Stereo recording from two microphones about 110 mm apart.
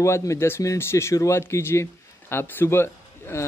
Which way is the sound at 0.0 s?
25° left (ahead or behind).